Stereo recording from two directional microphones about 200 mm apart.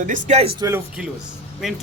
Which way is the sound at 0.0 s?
35° right (ahead or behind).